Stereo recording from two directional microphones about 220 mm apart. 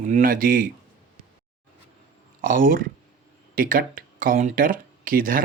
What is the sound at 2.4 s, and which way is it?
Speech, 40° right (ahead or behind).